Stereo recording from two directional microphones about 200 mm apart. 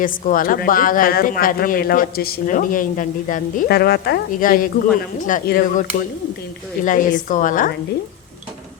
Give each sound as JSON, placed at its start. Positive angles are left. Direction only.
{"t": 0.0, "sound": "speech", "side_deg": 45}